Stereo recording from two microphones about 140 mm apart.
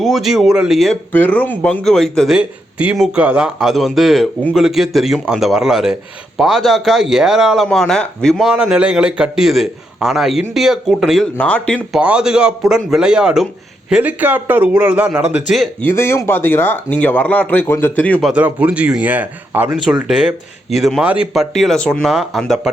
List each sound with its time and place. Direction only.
0.0 s speech: centre (ahead or behind)
1.1 s speech: 10° left (ahead or behind)
11.9 s speech: 5° right (ahead or behind)
15.8 s speech: 15° left (ahead or behind)
18.2 s speech: 10° right (ahead or behind)